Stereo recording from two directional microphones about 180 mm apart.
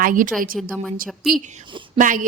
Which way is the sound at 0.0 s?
50° right (ahead or behind).